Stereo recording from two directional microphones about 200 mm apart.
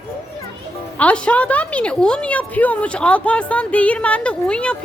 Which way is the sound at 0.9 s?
5° left (ahead or behind).